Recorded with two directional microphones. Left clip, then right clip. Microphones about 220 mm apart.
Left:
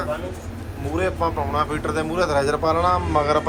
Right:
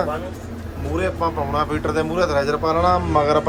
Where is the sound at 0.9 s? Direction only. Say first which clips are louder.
Right 1 dB; 10° right (ahead or behind).